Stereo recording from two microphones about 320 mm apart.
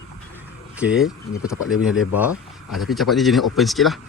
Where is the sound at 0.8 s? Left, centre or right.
Centre.